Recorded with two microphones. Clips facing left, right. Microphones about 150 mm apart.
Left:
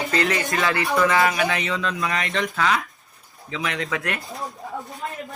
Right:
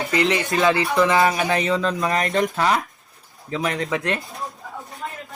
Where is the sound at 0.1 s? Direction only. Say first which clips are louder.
Right 4 dB; 20° right (ahead or behind).